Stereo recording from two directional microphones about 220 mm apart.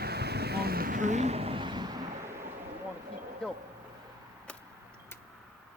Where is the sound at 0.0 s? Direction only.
45° right (ahead or behind); by 2.3 s 20° right (ahead or behind).